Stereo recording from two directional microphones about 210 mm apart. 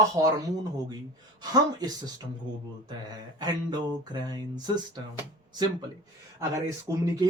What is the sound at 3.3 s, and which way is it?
Speech, 20° right (ahead or behind).